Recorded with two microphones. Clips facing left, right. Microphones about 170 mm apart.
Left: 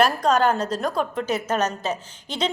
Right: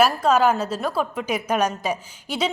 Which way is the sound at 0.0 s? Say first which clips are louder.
Right 1 dB; 5° right (ahead or behind).